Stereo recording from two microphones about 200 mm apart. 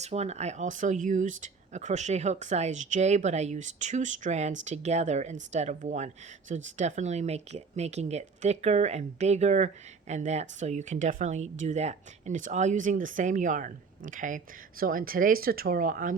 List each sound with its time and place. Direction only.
0.0 s speech: 35° right (ahead or behind)